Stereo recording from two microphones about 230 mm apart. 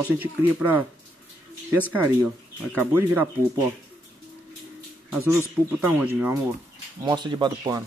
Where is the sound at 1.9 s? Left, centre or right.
Centre.